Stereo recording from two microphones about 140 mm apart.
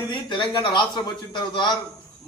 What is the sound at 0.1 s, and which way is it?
Speech, 35° left (ahead or behind).